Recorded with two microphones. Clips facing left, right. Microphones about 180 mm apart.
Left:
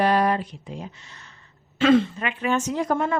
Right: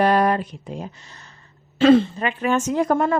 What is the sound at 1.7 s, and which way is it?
A woman's voice, 35° right (ahead or behind).